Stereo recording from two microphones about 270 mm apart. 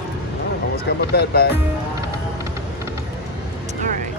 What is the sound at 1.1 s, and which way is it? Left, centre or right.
Speech, left.